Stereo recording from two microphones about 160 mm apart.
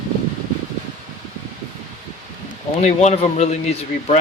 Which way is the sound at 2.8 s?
45° left (ahead or behind).